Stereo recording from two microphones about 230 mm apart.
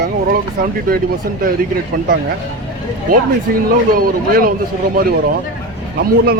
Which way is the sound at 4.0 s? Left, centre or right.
Right.